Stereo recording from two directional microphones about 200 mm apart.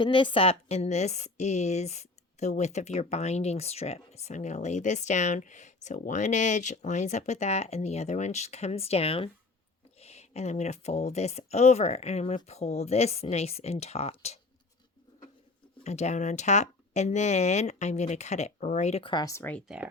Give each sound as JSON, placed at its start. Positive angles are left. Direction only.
{"t": 0.0, "sound": "a woman's voice", "side_deg": 25}
{"t": 15.8, "sound": "a woman's voice", "side_deg": 35}
{"t": 19.6, "sound": "speech", "side_deg": -5}